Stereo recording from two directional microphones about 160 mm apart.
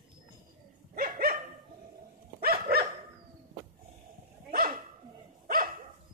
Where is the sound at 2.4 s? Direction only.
70° right (ahead or behind).